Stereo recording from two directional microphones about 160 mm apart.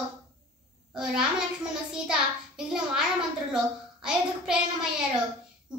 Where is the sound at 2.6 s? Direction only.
5° right (ahead or behind).